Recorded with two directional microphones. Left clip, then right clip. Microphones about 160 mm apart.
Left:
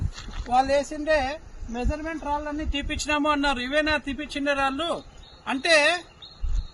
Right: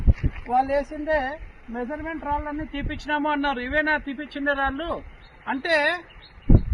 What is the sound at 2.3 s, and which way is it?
A man's voice, 20° left (ahead or behind).